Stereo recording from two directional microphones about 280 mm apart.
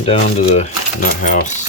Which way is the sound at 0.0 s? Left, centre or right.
Left.